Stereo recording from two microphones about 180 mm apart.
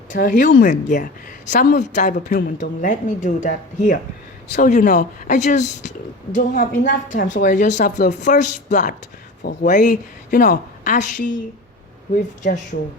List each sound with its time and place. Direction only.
0.1 s a woman's voice: 45° left (ahead or behind)